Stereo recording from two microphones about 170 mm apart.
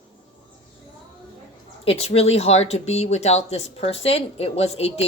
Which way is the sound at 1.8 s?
35° left (ahead or behind).